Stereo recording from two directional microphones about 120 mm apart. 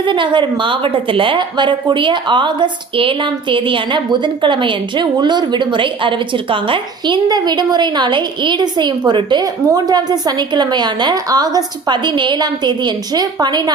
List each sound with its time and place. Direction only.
0.0 s a woman's voice: 40° right (ahead or behind)